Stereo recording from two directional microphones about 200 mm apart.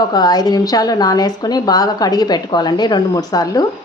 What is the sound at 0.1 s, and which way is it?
A woman's voice, 20° left (ahead or behind).